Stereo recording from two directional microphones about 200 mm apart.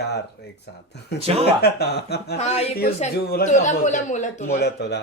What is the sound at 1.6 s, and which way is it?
Speech, 55° left (ahead or behind).